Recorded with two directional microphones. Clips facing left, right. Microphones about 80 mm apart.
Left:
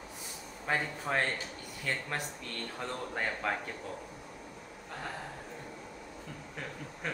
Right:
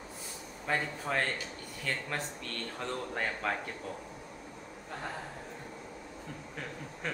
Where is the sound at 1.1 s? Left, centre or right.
Centre.